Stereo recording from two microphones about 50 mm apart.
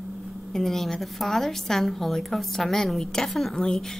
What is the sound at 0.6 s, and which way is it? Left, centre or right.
A woman's voice, centre.